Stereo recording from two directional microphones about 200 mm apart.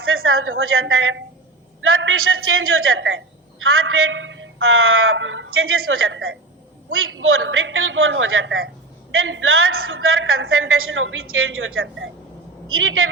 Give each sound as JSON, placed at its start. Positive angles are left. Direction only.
{"t": 0.0, "sound": "a woman's voice", "side_deg": -90}